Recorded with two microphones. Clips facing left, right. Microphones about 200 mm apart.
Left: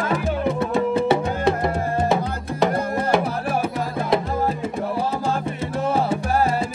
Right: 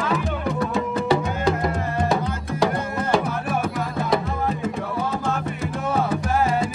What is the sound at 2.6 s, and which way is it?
Music, 20° left (ahead or behind).